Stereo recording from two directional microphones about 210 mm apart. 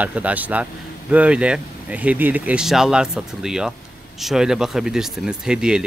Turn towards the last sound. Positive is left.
turn(degrees=-5)  # may be behind; listen again after turning